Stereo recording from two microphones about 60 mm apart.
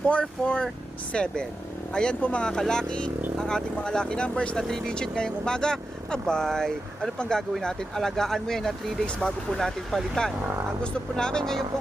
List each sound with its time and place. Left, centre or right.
0.1 s speech: left